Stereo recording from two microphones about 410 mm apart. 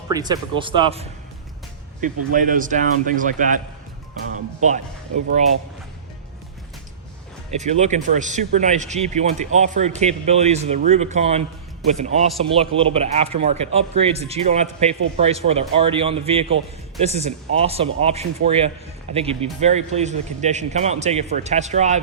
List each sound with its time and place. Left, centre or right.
0.1 s speech: centre
2.3 s speech: centre
4.6 s speech: centre
7.5 s speech: centre